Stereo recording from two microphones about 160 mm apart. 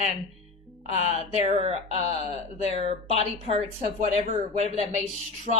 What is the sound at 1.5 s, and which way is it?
A man's voice, 40° right (ahead or behind).